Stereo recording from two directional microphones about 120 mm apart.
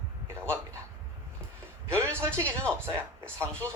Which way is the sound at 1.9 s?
20° right (ahead or behind).